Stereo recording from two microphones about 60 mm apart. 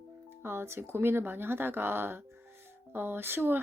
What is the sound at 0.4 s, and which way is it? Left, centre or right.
A woman's voice, right.